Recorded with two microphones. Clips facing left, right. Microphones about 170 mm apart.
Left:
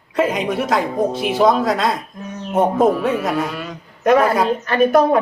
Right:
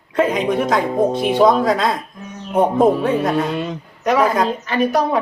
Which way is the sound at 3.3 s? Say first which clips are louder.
Right 3 dB; 25° right (ahead or behind).